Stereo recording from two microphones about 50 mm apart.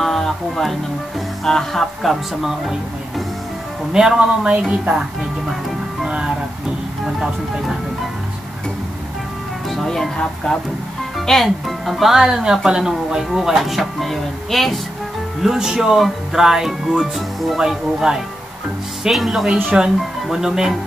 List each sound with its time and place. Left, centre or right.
0.0 s music: centre
1.4 s speech: centre
2.4 s speech: centre
3.9 s speech: centre
4.5 s a woman's voice: right
6.0 s speech: centre
9.8 s speech: centre
11.1 s speech: centre
15.4 s speech: centre